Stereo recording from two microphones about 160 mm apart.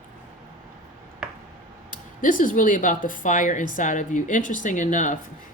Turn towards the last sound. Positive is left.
turn(degrees=55)  # may be behind; listen again after turning